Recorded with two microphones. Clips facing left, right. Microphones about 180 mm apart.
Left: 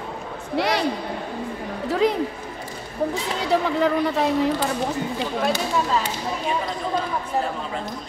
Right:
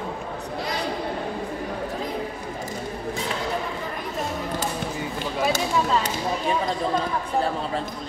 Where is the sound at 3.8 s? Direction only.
85° left.